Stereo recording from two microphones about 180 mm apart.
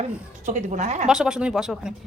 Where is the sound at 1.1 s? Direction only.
5° right (ahead or behind).